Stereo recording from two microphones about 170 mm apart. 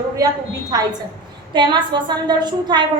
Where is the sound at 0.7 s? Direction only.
20° right (ahead or behind).